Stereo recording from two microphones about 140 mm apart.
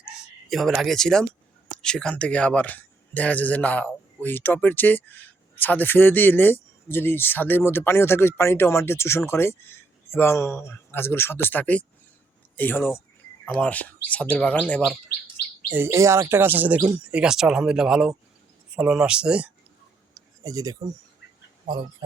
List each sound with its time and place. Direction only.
0.5 s speech: centre (ahead or behind)
15.7 s chirp: 20° right (ahead or behind)
17.0 s speech: 5° right (ahead or behind)
18.8 s chirp: 5° right (ahead or behind)
20.4 s speech: 25° right (ahead or behind)